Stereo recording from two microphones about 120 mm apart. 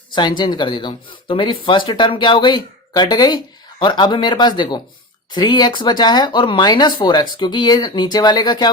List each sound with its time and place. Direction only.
0.1 s speech: 40° left (ahead or behind)